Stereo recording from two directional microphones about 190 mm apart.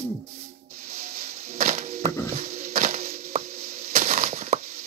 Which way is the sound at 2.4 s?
40° right (ahead or behind).